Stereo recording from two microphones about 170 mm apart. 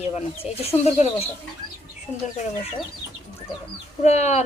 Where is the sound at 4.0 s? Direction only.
40° left (ahead or behind).